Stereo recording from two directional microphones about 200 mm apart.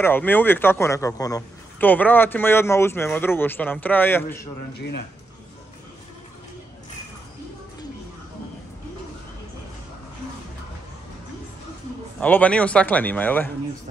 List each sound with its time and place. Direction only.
0.0 s a man's voice: 10° left (ahead or behind)
4.7 s speech: 55° left (ahead or behind)
12.2 s a man's voice: 5° left (ahead or behind)